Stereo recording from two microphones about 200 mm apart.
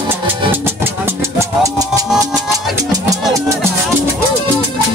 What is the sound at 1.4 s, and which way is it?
Music, 15° right (ahead or behind).